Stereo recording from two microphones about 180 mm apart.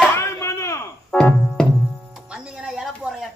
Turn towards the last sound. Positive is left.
turn(degrees=-5)  # may be behind; listen again after turning